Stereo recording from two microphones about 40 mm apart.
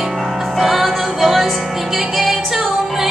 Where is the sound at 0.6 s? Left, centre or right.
Centre.